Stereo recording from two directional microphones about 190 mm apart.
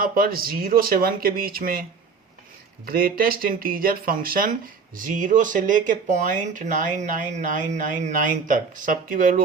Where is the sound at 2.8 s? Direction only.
50° right (ahead or behind).